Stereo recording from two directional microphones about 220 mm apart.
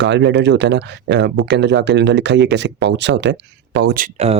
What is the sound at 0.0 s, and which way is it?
Speech, 50° right (ahead or behind).